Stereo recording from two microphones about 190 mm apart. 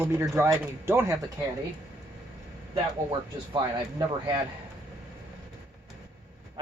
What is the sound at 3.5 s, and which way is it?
Speech, 20° right (ahead or behind).